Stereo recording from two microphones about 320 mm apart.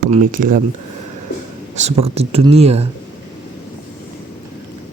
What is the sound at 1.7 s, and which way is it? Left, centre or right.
Speech, centre.